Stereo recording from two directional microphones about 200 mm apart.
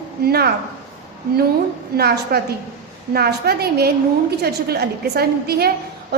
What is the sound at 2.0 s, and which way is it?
A woman's voice, 50° right (ahead or behind).